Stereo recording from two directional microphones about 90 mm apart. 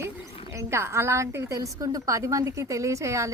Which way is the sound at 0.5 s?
30° right (ahead or behind).